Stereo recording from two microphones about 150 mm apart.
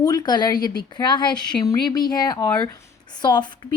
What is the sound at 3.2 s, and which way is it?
Speech, 30° left (ahead or behind).